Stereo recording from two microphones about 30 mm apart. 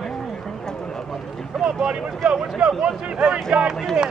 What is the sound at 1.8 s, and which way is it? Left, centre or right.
Speech, right.